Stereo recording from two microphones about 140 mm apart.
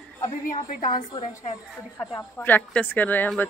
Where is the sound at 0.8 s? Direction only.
30° left (ahead or behind).